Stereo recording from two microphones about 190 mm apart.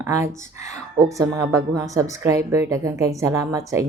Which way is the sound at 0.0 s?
15° right (ahead or behind).